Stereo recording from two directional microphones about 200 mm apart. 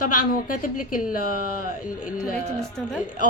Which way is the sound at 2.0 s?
Centre (ahead or behind).